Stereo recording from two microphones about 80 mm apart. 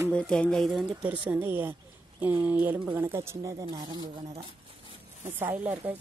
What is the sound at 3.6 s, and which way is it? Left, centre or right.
Speech, right.